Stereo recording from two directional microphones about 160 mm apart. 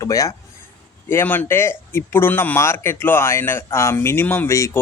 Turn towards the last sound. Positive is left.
turn(degrees=15)  # may be behind; listen again after turning